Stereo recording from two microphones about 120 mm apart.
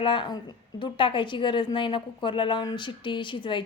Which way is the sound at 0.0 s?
40° left (ahead or behind).